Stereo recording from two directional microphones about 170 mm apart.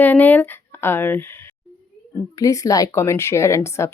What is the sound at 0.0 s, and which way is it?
A woman's voice, 10° left (ahead or behind).